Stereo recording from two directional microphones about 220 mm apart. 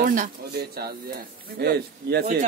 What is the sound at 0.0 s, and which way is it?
Speech, 35° right (ahead or behind).